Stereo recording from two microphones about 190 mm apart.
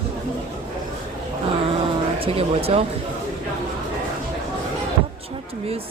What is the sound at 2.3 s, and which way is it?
Speech, 30° right (ahead or behind).